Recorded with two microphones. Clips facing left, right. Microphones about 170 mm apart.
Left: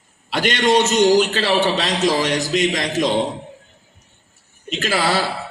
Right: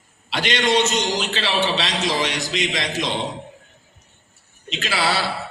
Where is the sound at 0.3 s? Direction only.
45° left (ahead or behind).